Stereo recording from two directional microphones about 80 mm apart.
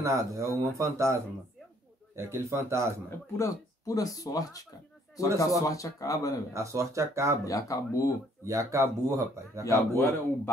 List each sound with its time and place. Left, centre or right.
0.0 s speech: right
3.3 s speech: left
6.5 s speech: right
7.4 s speech: left
8.5 s speech: right
9.9 s a man's voice: left